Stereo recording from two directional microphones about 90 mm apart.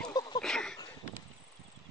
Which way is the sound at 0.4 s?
5° left (ahead or behind).